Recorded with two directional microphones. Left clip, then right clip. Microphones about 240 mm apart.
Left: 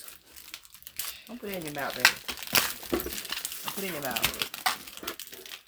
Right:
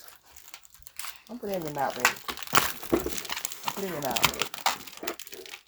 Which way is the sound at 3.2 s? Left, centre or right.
Right.